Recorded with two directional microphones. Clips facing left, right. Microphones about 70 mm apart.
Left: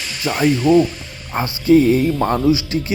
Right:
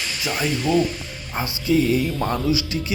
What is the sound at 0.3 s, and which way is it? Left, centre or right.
Speech, left.